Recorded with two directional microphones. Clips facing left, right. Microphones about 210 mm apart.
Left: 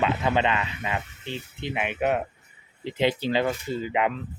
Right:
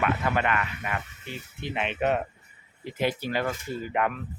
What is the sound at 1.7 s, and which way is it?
Speech, 10° left (ahead or behind).